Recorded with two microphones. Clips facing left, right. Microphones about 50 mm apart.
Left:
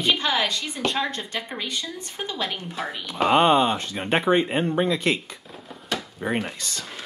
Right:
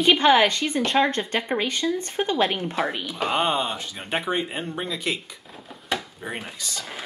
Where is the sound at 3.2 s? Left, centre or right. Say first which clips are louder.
Left 6 dB; left.